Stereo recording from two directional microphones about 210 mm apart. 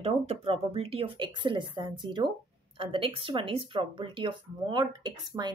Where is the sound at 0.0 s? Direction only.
30° right (ahead or behind).